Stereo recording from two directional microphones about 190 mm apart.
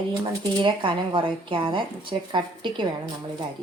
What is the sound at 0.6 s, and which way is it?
Speech, 25° right (ahead or behind).